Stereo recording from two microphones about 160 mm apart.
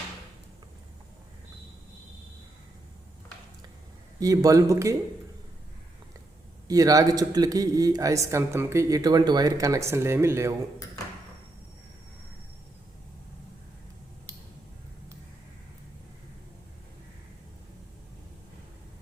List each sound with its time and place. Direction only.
4.2 s speech: 20° right (ahead or behind)
6.7 s speech: 20° right (ahead or behind)